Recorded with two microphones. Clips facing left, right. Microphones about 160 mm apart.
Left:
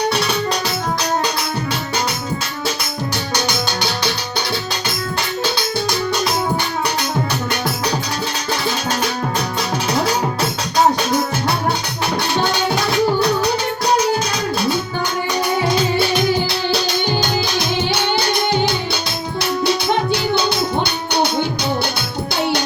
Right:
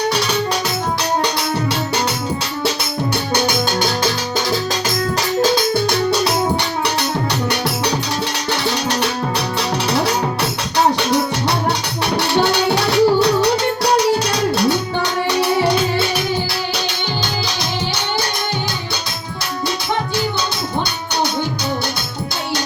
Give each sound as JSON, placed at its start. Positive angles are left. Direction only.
{"t": 5.4, "sound": "music", "side_deg": -45}
{"t": 8.6, "sound": "music", "side_deg": -75}
{"t": 12.1, "sound": "music", "side_deg": -75}
{"t": 15.3, "sound": "music", "side_deg": -80}